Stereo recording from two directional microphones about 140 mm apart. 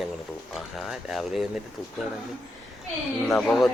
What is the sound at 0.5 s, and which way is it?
Speech, centre (ahead or behind).